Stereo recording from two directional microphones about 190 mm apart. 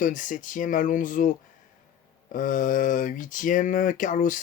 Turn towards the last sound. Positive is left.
turn(degrees=45)  # may be behind; listen again after turning